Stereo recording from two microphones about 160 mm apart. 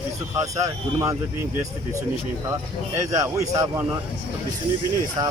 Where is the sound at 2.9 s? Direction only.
20° right (ahead or behind).